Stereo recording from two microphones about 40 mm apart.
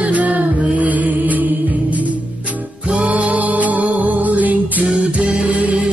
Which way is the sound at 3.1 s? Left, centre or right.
Right.